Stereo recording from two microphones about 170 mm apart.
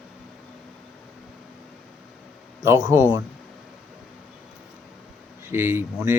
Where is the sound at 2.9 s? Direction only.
15° right (ahead or behind).